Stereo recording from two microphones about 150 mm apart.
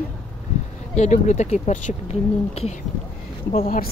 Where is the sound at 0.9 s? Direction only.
50° left (ahead or behind).